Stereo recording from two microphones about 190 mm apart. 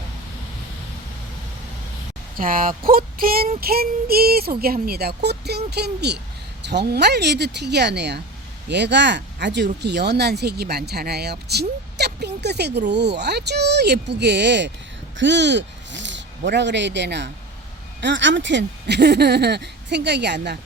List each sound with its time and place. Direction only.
2.4 s child singing: 50° right (ahead or behind)
6.7 s speech: 60° right (ahead or behind)